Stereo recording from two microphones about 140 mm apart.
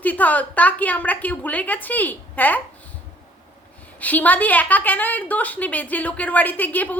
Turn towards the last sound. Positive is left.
turn(degrees=10)  # may be behind; listen again after turning